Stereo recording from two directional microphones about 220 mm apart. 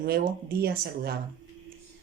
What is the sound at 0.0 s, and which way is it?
Speech, 45° right (ahead or behind).